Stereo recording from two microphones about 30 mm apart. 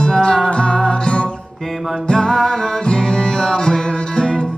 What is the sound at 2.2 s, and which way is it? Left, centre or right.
Music, centre.